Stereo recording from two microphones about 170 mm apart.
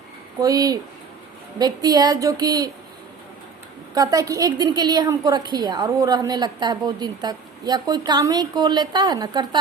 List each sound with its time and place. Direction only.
0.4 s a woman's voice: 20° right (ahead or behind)
3.9 s a woman's voice: 20° right (ahead or behind)